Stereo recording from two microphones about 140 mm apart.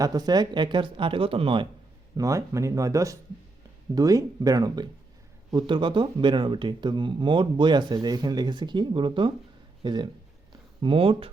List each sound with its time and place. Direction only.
0.0 s speech: 25° right (ahead or behind)
2.1 s speech: 25° right (ahead or behind)
10.5 s a sound: 35° right (ahead or behind)